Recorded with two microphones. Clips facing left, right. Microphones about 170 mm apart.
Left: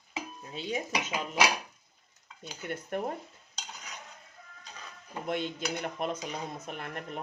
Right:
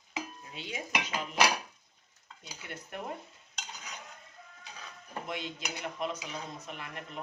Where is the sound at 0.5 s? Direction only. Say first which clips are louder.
Left 8 dB; 40° left (ahead or behind).